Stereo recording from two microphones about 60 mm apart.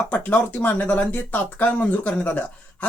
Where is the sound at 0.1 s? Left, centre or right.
Left.